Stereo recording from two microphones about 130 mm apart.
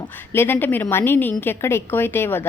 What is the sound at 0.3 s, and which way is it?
A woman's voice, 15° left (ahead or behind).